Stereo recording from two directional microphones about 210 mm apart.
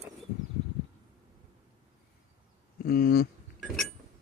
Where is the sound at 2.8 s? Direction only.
45° left (ahead or behind).